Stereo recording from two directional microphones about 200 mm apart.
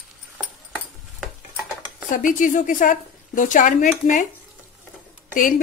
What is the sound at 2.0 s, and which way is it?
A woman's voice, 40° left (ahead or behind).